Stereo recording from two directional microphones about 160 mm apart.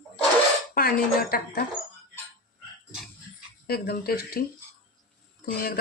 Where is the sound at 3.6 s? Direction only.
70° left (ahead or behind).